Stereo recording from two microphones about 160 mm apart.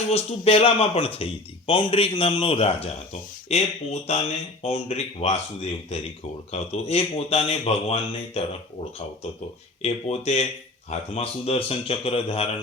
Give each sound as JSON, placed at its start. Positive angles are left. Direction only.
{"t": 0.1, "sound": "speech", "side_deg": 40}